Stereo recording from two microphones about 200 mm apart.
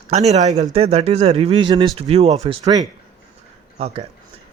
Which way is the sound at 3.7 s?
30° right (ahead or behind).